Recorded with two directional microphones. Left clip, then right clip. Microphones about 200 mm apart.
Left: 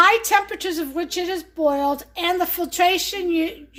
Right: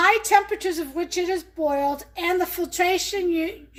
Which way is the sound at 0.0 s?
50° left (ahead or behind).